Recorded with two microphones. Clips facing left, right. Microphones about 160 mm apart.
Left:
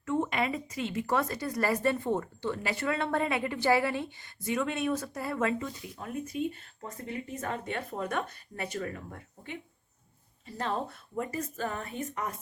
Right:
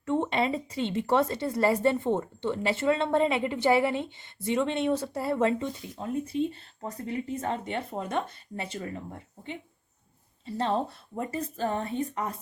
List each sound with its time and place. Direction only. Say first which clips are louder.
0.0 s a woman's voice: right 3 dB; 30° right (ahead or behind)